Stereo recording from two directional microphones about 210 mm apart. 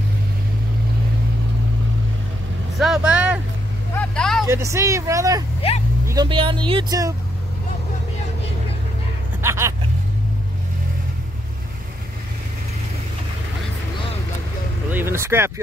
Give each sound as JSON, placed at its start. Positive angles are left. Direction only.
{"t": 2.8, "sound": "vehicle", "side_deg": -5}
{"t": 3.9, "sound": "vehicle", "side_deg": 5}
{"t": 4.5, "sound": "speech", "side_deg": -15}
{"t": 9.4, "sound": "vehicle", "side_deg": -15}
{"t": 14.9, "sound": "speech", "side_deg": -10}